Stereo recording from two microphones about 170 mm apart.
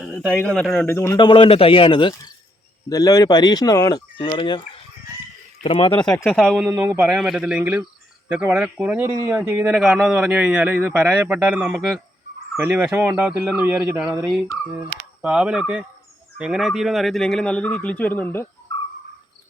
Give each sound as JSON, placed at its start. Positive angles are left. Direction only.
{"t": 0.0, "sound": "a sound", "side_deg": -5}
{"t": 0.4, "sound": "speech", "side_deg": 5}
{"t": 1.2, "sound": "speech", "side_deg": 30}
{"t": 5.6, "sound": "speech", "side_deg": 30}
{"t": 5.9, "sound": "speech", "side_deg": 5}
{"t": 6.6, "sound": "a man's voice", "side_deg": -15}
{"t": 14.3, "sound": "a man's voice", "side_deg": 0}